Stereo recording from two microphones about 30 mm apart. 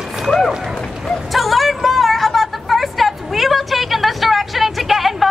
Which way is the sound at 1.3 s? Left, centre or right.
Centre.